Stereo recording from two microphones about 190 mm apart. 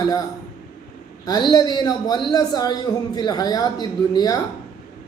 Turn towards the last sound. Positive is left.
turn(degrees=20)  # may be behind; listen again after turning